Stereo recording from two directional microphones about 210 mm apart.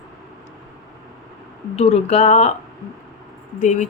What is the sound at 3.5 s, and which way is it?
Speech, 35° left (ahead or behind).